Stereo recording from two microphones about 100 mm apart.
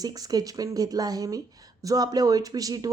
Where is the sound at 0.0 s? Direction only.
40° right (ahead or behind).